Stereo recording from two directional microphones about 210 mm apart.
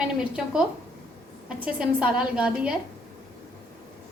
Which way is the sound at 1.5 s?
5° right (ahead or behind).